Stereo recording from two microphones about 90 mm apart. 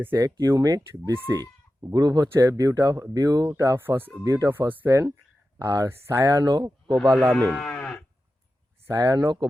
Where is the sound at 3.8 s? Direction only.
25° right (ahead or behind).